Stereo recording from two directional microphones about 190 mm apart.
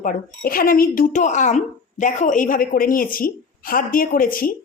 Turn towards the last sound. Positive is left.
turn(degrees=50)  # may be behind; listen again after turning